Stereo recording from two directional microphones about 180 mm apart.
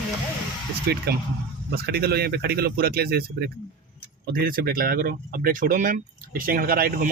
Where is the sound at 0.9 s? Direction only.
65° right (ahead or behind).